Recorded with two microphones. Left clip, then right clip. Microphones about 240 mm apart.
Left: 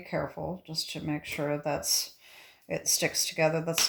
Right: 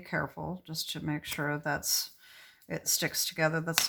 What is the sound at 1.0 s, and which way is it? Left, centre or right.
Speech, centre.